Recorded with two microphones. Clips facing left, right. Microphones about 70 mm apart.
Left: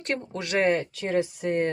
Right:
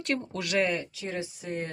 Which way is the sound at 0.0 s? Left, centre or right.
Left.